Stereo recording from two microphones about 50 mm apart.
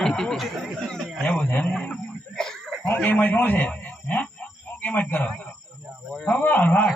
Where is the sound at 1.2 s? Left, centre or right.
Centre.